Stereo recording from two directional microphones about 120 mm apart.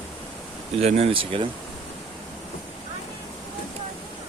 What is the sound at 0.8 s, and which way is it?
Speech, 60° right (ahead or behind).